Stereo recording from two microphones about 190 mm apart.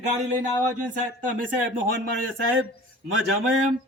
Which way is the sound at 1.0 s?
45° right (ahead or behind).